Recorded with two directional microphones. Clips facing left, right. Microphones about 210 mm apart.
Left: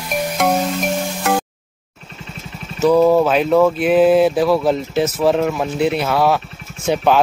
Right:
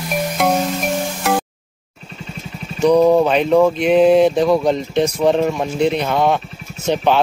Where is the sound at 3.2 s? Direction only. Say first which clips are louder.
Even; 5° left (ahead or behind).